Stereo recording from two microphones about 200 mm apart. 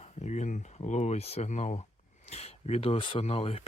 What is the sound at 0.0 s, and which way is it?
Speech, 35° left (ahead or behind).